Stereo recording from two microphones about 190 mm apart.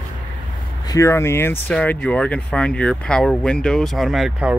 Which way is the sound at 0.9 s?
15° left (ahead or behind).